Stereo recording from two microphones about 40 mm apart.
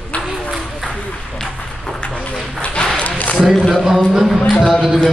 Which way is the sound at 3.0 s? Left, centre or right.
Left.